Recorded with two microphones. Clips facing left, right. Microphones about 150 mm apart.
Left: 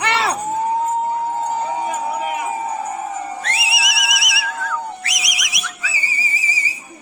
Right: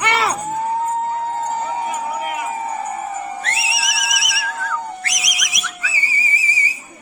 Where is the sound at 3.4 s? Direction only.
Centre (ahead or behind).